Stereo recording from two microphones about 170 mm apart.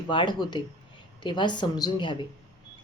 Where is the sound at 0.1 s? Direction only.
25° left (ahead or behind).